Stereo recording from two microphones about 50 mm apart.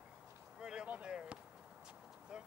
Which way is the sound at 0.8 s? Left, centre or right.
Right.